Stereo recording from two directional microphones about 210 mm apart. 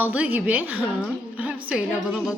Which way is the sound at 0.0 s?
10° right (ahead or behind).